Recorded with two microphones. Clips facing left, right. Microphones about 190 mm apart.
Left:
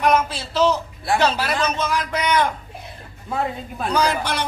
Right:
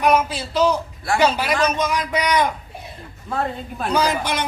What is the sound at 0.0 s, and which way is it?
A man's voice, 10° right (ahead or behind).